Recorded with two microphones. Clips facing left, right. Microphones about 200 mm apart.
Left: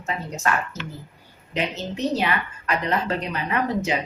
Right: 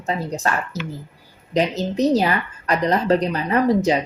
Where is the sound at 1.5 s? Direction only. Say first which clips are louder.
Right 7 dB; 40° right (ahead or behind).